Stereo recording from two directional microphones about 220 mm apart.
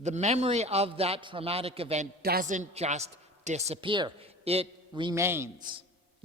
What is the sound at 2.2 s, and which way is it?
A woman's voice, 45° right (ahead or behind).